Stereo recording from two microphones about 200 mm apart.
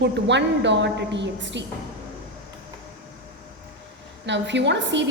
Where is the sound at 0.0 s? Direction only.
60° right (ahead or behind).